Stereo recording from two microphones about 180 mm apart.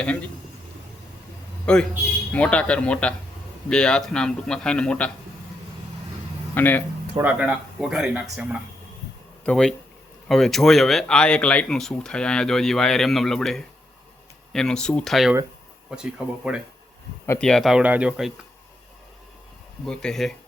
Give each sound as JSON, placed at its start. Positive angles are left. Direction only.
{"t": 0.0, "sound": "speech", "side_deg": 5}
{"t": 1.6, "sound": "a man's voice", "side_deg": 5}
{"t": 6.5, "sound": "speech", "side_deg": 10}
{"t": 7.2, "sound": "speech", "side_deg": -5}
{"t": 9.4, "sound": "speech", "side_deg": 5}
{"t": 17.2, "sound": "speech", "side_deg": 5}
{"t": 19.8, "sound": "speech", "side_deg": 5}